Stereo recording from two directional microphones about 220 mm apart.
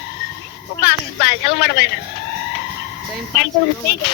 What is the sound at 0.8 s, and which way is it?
Speech, 50° left (ahead or behind).